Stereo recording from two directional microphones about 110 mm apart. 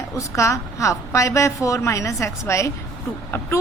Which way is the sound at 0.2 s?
30° left (ahead or behind).